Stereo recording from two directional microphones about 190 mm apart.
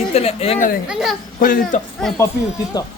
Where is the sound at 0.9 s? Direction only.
Centre (ahead or behind).